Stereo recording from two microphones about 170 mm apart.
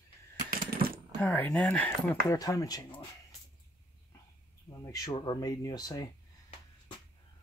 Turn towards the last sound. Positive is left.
turn(degrees=20)  # may be behind; listen again after turning